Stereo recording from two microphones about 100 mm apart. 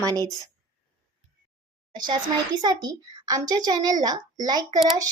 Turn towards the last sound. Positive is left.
turn(degrees=-40)  # may be behind; listen again after turning